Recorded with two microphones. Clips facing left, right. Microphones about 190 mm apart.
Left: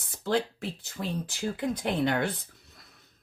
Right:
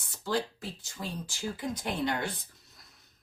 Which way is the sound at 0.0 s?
60° left (ahead or behind).